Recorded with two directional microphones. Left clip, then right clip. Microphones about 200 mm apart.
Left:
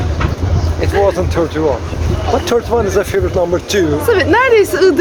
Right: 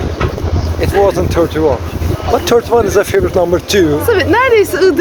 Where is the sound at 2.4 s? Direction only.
50° right (ahead or behind).